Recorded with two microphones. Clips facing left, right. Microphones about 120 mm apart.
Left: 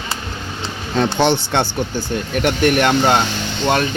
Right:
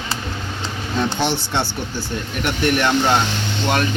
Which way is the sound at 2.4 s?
50° left (ahead or behind).